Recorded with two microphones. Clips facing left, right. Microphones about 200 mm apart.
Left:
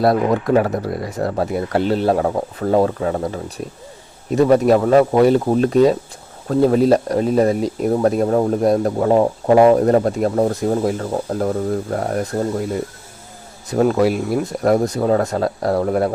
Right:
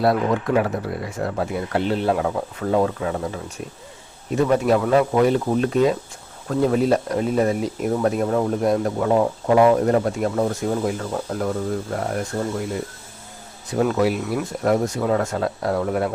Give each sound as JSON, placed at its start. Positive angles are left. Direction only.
{"t": 0.0, "sound": "speech", "side_deg": 40}
{"t": 4.4, "sound": "speech", "side_deg": 40}
{"t": 13.7, "sound": "speech", "side_deg": 40}